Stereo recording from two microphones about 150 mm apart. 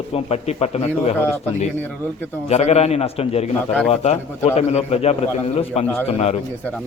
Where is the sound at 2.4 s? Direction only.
45° left (ahead or behind).